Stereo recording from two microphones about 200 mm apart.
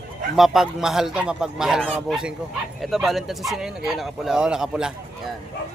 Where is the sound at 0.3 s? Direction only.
Centre (ahead or behind).